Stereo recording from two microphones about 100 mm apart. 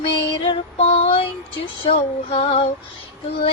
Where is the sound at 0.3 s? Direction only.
70° left (ahead or behind).